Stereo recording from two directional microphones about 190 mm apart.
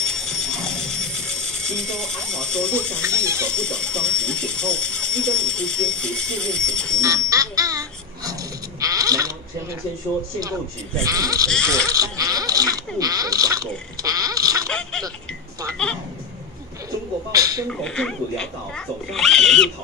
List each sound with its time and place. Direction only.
0.0 s a sound: 5° left (ahead or behind)
3.4 s speech: 5° left (ahead or behind)
7.0 s a sound: 20° right (ahead or behind)
11.1 s sheep: 20° right (ahead or behind)
11.4 s speech: 5° left (ahead or behind)
11.9 s speech: 20° right (ahead or behind)
14.7 s a sound: 5° left (ahead or behind)
15.8 s speech: 5° left (ahead or behind)
17.3 s speech: 20° right (ahead or behind)
17.8 s speech: 5° left (ahead or behind)